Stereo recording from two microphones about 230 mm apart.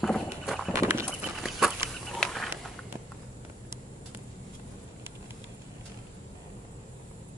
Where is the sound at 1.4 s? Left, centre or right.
Centre.